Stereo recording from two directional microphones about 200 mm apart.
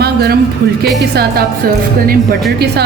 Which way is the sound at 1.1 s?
50° right (ahead or behind).